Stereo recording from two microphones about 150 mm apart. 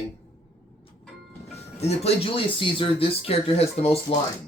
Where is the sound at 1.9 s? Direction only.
40° left (ahead or behind).